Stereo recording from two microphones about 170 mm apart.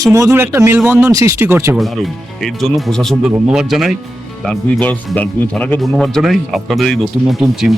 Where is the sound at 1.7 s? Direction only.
Centre (ahead or behind).